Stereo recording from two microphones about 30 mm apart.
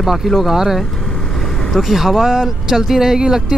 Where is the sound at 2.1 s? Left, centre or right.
Centre.